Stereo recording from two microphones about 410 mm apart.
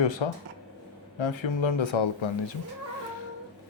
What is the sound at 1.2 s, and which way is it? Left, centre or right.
Speech, left.